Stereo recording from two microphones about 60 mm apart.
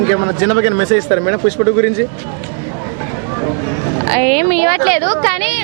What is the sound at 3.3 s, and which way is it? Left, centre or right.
A woman's voice, right.